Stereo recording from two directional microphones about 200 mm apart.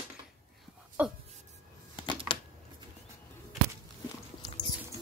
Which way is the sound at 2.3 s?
25° left (ahead or behind).